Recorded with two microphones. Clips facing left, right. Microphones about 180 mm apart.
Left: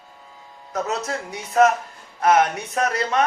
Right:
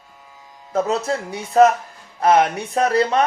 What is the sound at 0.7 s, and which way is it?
Speech, 30° right (ahead or behind).